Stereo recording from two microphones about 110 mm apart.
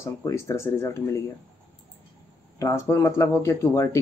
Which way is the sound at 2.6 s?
25° left (ahead or behind).